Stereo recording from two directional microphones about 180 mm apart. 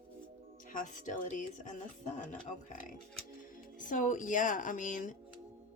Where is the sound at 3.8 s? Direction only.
45° left (ahead or behind).